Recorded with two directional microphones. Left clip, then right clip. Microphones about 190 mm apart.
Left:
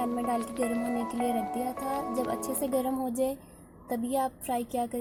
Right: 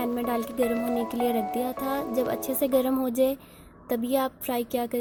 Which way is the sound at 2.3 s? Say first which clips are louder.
Right 5 dB; 45° right (ahead or behind).